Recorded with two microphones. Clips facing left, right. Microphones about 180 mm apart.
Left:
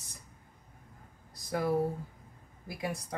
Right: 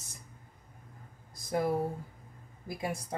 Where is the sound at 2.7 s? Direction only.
25° right (ahead or behind).